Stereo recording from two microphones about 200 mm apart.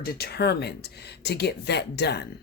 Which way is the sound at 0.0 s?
50° left (ahead or behind).